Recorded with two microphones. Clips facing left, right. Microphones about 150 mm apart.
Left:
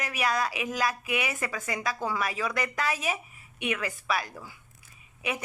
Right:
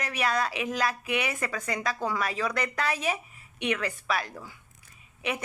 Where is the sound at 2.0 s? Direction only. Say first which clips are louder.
Right 1 dB; 5° left (ahead or behind).